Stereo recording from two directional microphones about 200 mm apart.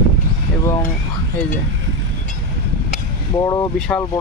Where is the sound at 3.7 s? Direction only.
5° left (ahead or behind).